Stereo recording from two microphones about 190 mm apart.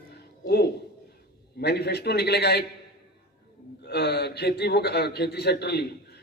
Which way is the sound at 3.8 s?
60° left (ahead or behind).